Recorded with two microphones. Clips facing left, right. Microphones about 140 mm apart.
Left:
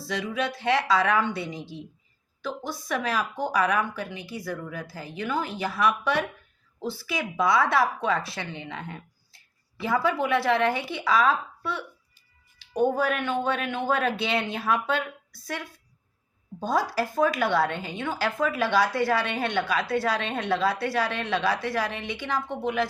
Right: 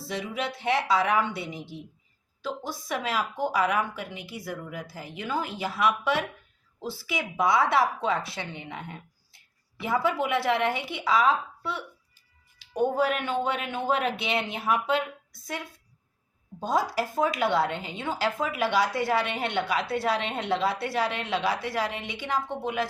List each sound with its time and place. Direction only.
0.1 s speech: 25° right (ahead or behind)
2.8 s speech: 25° right (ahead or behind)